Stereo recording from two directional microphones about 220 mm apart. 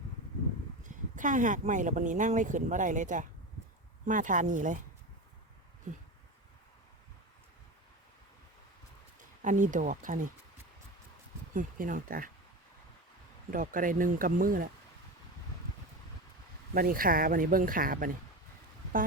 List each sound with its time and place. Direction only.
0.9 s speech: 35° right (ahead or behind)
9.4 s speech: 35° right (ahead or behind)
11.5 s speech: 35° right (ahead or behind)
13.5 s speech: 40° right (ahead or behind)
16.7 s speech: 40° right (ahead or behind)